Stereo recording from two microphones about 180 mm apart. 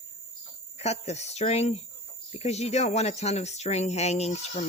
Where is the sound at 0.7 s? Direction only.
35° left (ahead or behind).